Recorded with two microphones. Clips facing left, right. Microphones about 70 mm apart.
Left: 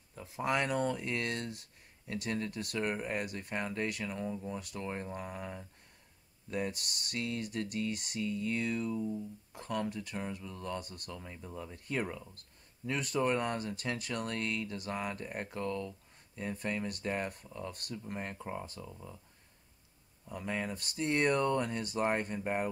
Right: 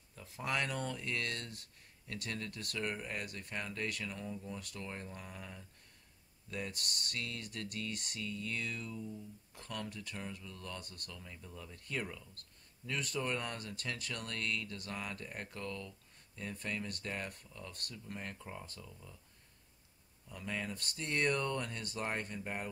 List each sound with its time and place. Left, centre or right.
0.1 s speech: centre
11.1 s speech: left
20.2 s speech: left